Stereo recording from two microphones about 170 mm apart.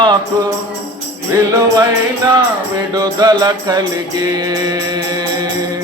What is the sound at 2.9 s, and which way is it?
Music, 20° right (ahead or behind).